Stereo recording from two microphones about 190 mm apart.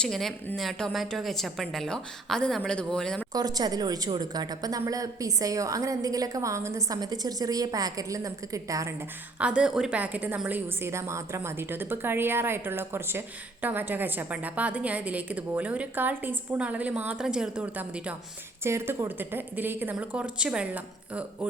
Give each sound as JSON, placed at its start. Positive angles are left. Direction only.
{"t": 0.0, "sound": "a woman's voice", "side_deg": 0}
{"t": 3.3, "sound": "a woman's voice", "side_deg": -20}
{"t": 9.4, "sound": "a woman's voice", "side_deg": -5}